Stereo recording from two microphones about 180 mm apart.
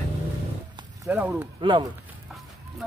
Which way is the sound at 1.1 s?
5° right (ahead or behind).